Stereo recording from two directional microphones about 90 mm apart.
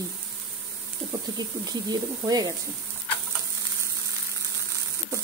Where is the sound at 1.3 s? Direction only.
50° right (ahead or behind).